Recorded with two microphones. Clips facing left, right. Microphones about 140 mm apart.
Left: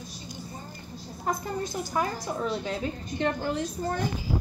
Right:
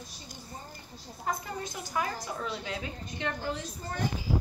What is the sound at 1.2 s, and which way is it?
A woman's voice, 35° left (ahead or behind).